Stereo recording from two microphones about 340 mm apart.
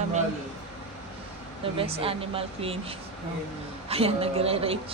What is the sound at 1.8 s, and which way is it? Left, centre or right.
Speech, centre.